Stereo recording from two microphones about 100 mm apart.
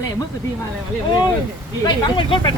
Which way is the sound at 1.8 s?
60° left (ahead or behind).